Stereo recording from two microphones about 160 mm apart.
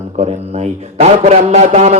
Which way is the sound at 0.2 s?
45° right (ahead or behind).